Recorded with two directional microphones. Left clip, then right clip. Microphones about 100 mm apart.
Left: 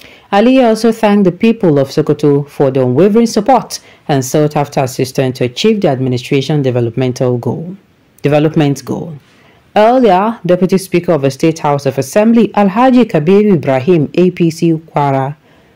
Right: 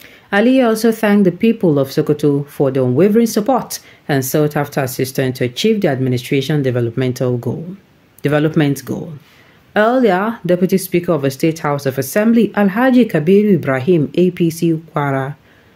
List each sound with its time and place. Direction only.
0.3 s speech: 15° left (ahead or behind)